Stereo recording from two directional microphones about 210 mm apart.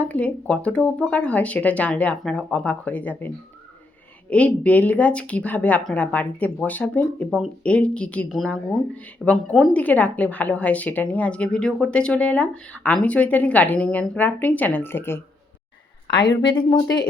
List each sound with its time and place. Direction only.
0.0 s speech: 5° left (ahead or behind)
16.0 s a woman's voice: 20° left (ahead or behind)